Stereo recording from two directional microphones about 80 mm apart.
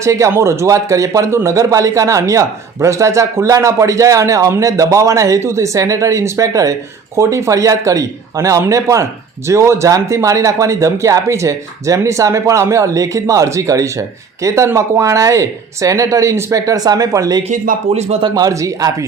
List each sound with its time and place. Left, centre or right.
0.0 s a man's voice: right
7.2 s a man's voice: right